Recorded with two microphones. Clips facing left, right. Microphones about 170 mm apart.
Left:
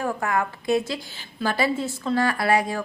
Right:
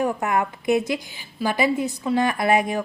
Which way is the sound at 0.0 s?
20° right (ahead or behind).